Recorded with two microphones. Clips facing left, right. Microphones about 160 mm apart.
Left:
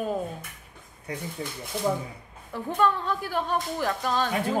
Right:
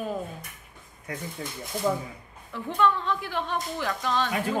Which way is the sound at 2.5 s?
40° left (ahead or behind).